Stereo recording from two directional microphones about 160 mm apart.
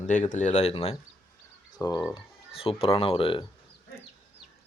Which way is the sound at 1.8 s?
25° left (ahead or behind).